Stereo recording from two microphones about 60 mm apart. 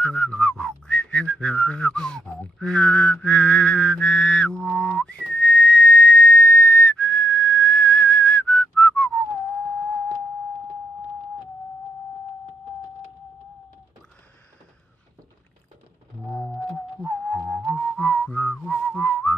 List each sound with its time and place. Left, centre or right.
0.0 s whistling: centre
16.7 s music: centre
18.0 s whistling: left